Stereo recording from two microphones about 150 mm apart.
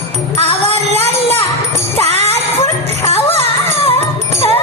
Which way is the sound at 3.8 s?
40° left (ahead or behind).